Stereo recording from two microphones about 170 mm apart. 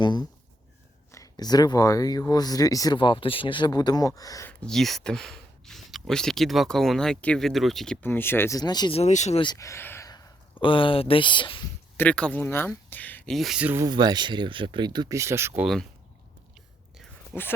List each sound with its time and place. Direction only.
0.0 s a sound: 25° left (ahead or behind)
1.1 s speech: 20° left (ahead or behind)
4.6 s speech: centre (ahead or behind)
8.0 s speech: 10° left (ahead or behind)
9.0 s speech: 40° left (ahead or behind)
9.4 s a sound: 20° left (ahead or behind)
10.6 s speech: 30° left (ahead or behind)
11.9 s speech: 5° left (ahead or behind); by 13.8 s 10° right (ahead or behind)
13.8 s speech: 25° right (ahead or behind)
15.6 s speech: centre (ahead or behind)